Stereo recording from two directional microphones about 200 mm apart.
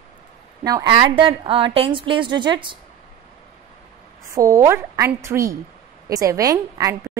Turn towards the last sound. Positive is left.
turn(degrees=-15)  # may be behind; listen again after turning